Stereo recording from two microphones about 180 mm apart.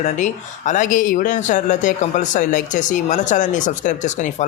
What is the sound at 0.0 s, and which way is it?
Speech, 45° left (ahead or behind).